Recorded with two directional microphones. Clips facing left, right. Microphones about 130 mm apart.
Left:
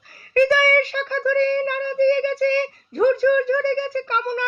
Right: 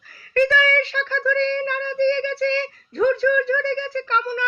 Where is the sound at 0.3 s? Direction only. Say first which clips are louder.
Left 2 dB; 40° left (ahead or behind).